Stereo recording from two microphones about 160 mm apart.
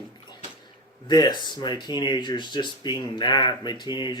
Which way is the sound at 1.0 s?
25° left (ahead or behind).